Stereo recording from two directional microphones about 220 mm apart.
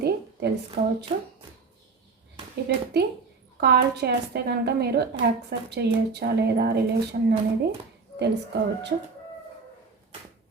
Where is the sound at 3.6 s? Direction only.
45° right (ahead or behind).